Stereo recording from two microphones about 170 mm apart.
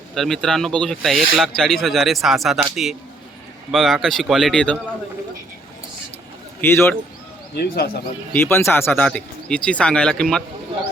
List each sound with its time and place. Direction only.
0.1 s speech: centre (ahead or behind)
6.6 s speech: 15° left (ahead or behind)
7.5 s speech: 65° left (ahead or behind)
8.3 s speech: 15° left (ahead or behind)